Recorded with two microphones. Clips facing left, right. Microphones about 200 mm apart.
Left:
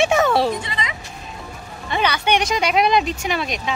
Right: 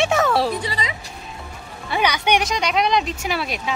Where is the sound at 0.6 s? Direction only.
35° right (ahead or behind).